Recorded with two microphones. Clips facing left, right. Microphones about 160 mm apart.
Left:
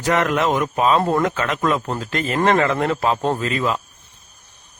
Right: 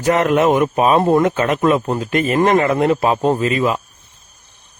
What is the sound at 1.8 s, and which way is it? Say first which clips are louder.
A man's voice: right 6 dB; 15° right (ahead or behind).